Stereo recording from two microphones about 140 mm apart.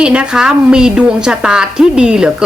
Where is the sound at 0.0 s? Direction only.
5° right (ahead or behind).